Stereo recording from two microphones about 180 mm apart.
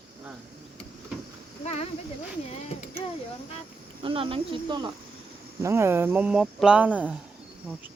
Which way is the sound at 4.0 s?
30° right (ahead or behind).